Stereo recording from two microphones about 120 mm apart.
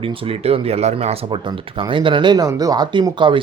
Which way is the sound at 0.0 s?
55° right (ahead or behind).